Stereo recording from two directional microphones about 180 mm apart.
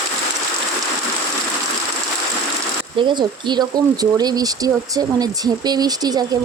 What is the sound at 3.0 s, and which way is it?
Speech, 25° right (ahead or behind).